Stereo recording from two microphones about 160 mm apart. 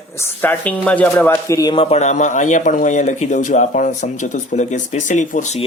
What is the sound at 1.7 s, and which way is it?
Speech, 40° left (ahead or behind).